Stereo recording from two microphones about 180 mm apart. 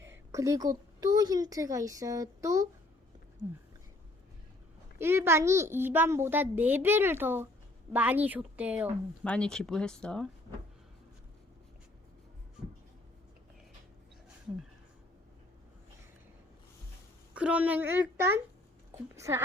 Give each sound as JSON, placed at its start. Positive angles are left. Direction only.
{"t": 0.0, "sound": "a woman's voice", "side_deg": -15}
{"t": 4.9, "sound": "a child's voice", "side_deg": -15}
{"t": 9.2, "sound": "speech", "side_deg": 5}
{"t": 12.6, "sound": "writing", "side_deg": -5}
{"t": 17.3, "sound": "a child's voice", "side_deg": -10}